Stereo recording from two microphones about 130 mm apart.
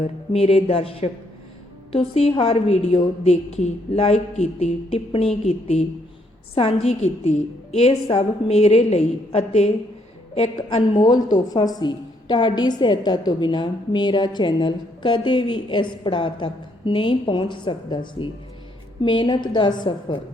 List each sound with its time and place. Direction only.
0.0 s a woman's voice: 45° left (ahead or behind)
10.9 s a woman's voice: 35° left (ahead or behind)